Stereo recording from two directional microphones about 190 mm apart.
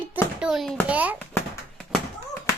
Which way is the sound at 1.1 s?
5° left (ahead or behind).